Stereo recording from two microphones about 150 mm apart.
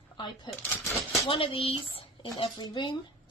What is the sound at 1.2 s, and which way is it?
Speech, 35° left (ahead or behind).